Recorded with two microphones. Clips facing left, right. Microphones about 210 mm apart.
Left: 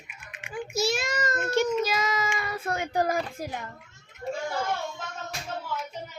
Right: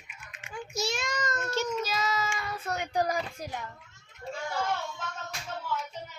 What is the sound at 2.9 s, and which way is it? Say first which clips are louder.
Speech: left 2 dB; 55° left (ahead or behind).